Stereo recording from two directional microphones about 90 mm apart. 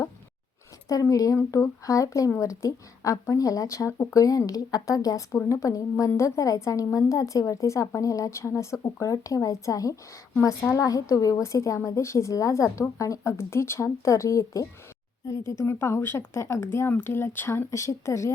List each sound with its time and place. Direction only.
0.9 s speech: 40° left (ahead or behind)
10.8 s speech: 40° left (ahead or behind)